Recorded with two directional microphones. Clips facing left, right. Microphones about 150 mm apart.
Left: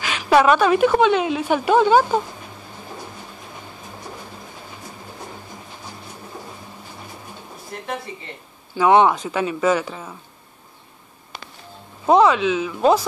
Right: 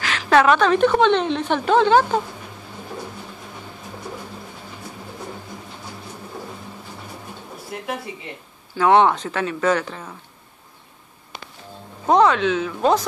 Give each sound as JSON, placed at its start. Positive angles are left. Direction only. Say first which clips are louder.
{"t": 0.0, "sound": "a woman's voice", "louder": "left 1 dB", "side_deg": 15}
{"t": 7.7, "sound": "a sound", "louder": "right 2 dB", "side_deg": -5}
{"t": 8.7, "sound": "a woman's voice", "louder": "left 1 dB", "side_deg": 10}
{"t": 11.3, "sound": "music", "louder": "even", "side_deg": -15}
{"t": 12.1, "sound": "a woman's voice", "louder": "left 1 dB", "side_deg": 5}